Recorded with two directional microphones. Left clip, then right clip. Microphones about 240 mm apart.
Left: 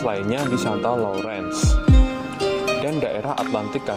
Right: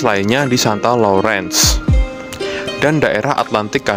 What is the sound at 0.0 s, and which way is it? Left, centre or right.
Speech, right.